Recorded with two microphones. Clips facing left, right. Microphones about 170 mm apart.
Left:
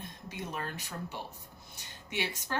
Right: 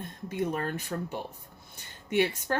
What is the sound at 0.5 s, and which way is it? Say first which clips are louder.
Speech: right 7 dB; 50° right (ahead or behind).